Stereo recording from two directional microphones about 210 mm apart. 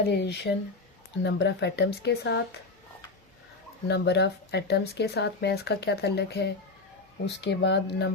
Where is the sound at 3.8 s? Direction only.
55° left (ahead or behind).